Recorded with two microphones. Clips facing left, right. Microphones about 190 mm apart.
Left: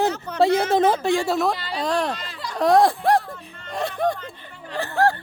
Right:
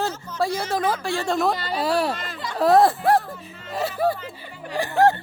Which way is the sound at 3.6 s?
5° right (ahead or behind).